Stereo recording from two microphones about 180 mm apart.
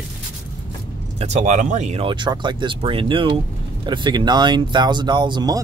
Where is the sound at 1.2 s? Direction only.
40° right (ahead or behind).